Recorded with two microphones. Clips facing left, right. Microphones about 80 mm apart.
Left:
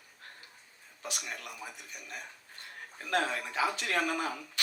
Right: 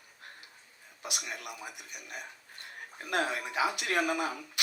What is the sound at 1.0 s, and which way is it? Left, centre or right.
Speech, centre.